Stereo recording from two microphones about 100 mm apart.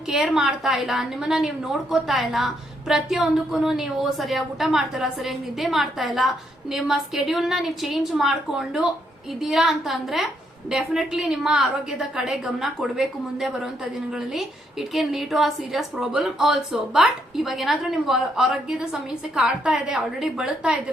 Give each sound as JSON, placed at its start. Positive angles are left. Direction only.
{"t": 0.1, "sound": "a woman's voice", "side_deg": -5}